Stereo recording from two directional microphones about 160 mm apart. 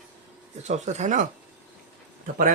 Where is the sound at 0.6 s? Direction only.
45° right (ahead or behind).